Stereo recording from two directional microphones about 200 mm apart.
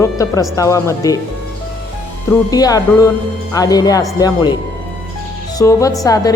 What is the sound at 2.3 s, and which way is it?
Speech, 20° left (ahead or behind).